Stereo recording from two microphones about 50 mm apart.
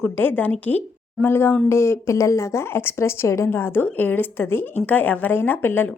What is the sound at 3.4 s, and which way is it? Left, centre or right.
A woman's voice, left.